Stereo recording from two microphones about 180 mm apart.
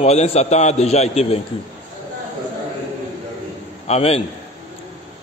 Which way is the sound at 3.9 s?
35° left (ahead or behind).